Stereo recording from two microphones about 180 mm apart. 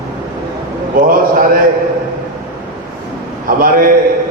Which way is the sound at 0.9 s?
50° right (ahead or behind).